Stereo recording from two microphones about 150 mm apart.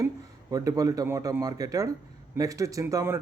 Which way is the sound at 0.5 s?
25° right (ahead or behind).